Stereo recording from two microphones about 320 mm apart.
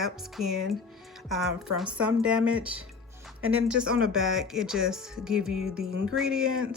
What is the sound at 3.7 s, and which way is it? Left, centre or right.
Speech, centre.